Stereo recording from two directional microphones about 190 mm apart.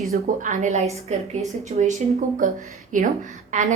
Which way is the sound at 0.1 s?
40° right (ahead or behind).